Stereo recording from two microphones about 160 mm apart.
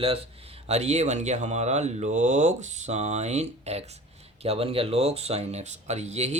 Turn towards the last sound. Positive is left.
turn(degrees=-45)  # may be behind; listen again after turning